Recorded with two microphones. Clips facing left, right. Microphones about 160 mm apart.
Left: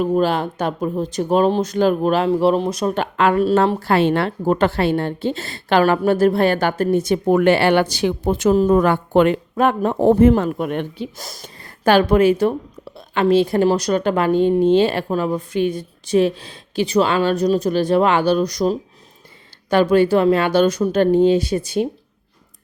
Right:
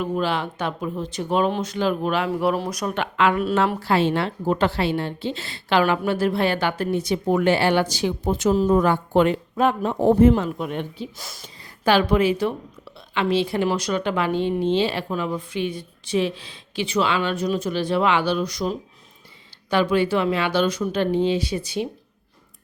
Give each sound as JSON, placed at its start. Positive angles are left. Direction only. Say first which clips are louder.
{"t": 0.0, "sound": "speech", "louder": "left 6 dB", "side_deg": 40}
{"t": 2.9, "sound": "speech", "louder": "left 2 dB", "side_deg": 40}
{"t": 3.8, "sound": "a woman's voice", "louder": "left 4 dB", "side_deg": 55}
{"t": 11.2, "sound": "a woman's voice", "louder": "left 4 dB", "side_deg": 40}